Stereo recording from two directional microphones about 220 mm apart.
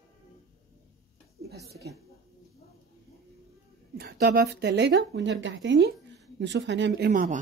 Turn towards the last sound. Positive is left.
turn(degrees=-40)  # may be behind; listen again after turning